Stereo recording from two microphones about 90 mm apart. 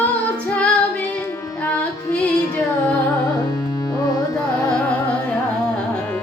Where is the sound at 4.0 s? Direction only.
45° left (ahead or behind).